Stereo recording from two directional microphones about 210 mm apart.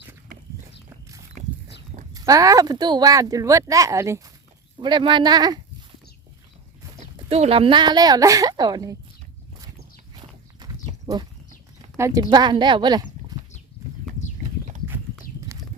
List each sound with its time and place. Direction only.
2.1 s speech: 15° right (ahead or behind)
7.3 s speech: 30° right (ahead or behind)
10.6 s a sound: 20° right (ahead or behind)
11.9 s speech: 15° right (ahead or behind)
14.8 s horse: 10° right (ahead or behind)